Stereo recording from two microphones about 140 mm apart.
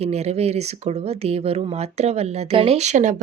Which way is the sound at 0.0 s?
50° right (ahead or behind).